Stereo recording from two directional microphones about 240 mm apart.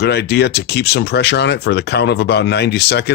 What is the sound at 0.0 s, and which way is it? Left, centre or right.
Speech, left.